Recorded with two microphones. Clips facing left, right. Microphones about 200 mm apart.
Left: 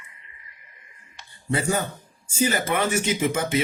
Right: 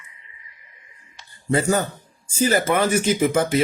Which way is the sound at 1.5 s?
40° right (ahead or behind).